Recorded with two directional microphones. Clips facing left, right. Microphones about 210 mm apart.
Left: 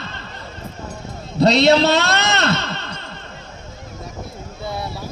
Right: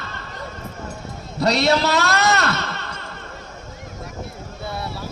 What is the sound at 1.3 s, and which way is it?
A man's voice, 25° left (ahead or behind).